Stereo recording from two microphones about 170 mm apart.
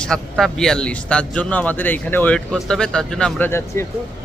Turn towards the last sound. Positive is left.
turn(degrees=15)  # may be behind; listen again after turning